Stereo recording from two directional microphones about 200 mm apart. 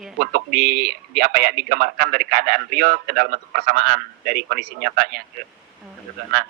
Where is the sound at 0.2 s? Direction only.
50° right (ahead or behind).